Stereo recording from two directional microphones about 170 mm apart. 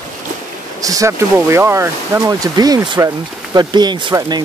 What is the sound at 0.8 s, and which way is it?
Speech, 20° right (ahead or behind).